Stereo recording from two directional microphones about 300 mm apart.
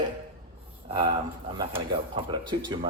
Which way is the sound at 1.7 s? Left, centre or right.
Centre.